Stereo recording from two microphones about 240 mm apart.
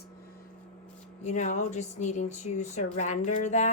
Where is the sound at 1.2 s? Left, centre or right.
Left.